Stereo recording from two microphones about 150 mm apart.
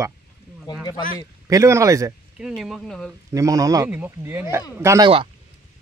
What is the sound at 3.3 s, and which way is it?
Speech, 20° right (ahead or behind).